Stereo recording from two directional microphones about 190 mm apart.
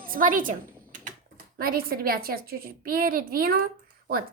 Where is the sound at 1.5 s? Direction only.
50° right (ahead or behind).